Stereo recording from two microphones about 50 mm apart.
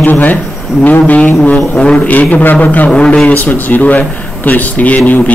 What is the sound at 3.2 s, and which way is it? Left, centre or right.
Speech, left.